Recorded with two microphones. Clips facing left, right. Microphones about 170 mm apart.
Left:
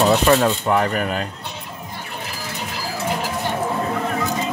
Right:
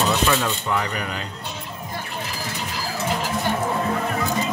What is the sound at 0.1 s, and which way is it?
Speech, 45° left (ahead or behind).